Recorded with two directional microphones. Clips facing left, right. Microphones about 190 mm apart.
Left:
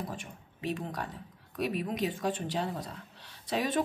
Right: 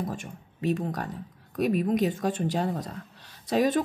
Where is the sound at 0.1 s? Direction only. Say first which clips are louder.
Right 5 dB; 45° right (ahead or behind).